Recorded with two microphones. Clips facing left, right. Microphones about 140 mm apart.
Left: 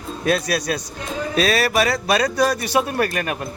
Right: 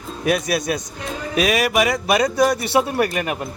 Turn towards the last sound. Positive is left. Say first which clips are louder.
# right 1 dB
turn(degrees=-15)  # may be behind; listen again after turning